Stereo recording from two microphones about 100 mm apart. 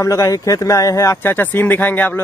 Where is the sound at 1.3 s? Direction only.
20° left (ahead or behind).